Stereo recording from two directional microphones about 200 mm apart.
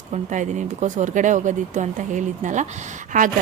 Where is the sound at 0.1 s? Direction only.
35° right (ahead or behind).